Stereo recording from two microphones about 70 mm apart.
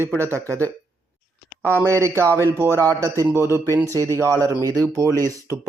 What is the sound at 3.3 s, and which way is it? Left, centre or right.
A man's voice, right.